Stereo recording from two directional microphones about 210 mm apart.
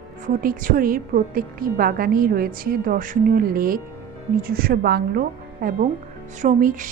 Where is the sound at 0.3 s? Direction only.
40° right (ahead or behind).